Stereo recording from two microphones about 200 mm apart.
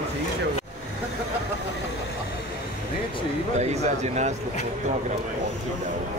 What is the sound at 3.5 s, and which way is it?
Speech, 35° right (ahead or behind).